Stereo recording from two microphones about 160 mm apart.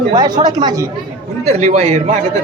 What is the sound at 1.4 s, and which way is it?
Speech, 45° right (ahead or behind).